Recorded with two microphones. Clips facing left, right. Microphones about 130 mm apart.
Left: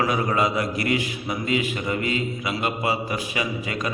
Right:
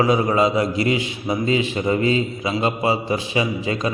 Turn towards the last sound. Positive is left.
turn(degrees=-25)  # may be behind; listen again after turning